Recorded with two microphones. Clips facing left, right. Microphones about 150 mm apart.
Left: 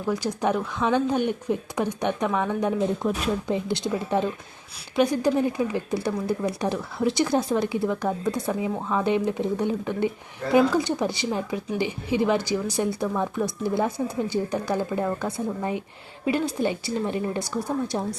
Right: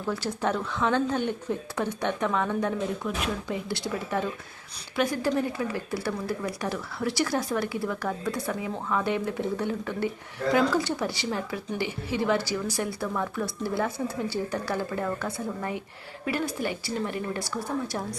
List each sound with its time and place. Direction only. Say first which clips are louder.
0.0 s speech: left 3 dB; 15° left (ahead or behind)
3.0 s speech: left 6 dB; 35° left (ahead or behind)
3.5 s speech: left 5 dB; 20° left (ahead or behind)